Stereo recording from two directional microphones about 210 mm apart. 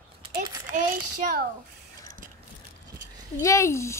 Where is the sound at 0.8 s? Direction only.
45° right (ahead or behind).